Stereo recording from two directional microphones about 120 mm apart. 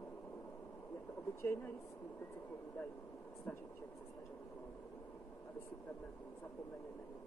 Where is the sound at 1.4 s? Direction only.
20° left (ahead or behind).